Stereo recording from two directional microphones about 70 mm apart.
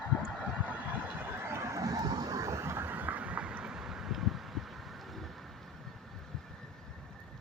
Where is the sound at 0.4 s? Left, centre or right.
Centre.